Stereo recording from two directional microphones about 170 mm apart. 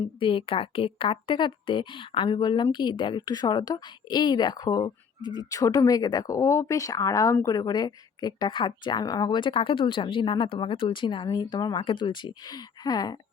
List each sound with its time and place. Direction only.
0.2 s speech: 30° left (ahead or behind)